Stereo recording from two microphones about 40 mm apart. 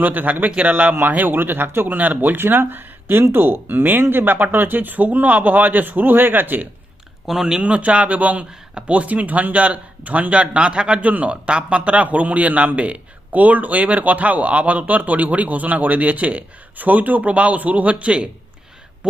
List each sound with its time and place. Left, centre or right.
0.0 s speech: right
1.1 s speech: right
2.0 s speech: right
2.4 s speech: right
7.3 s speech: centre
7.6 s a man's voice: right